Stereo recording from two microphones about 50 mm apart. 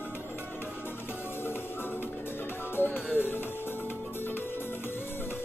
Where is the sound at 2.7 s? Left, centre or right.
Left.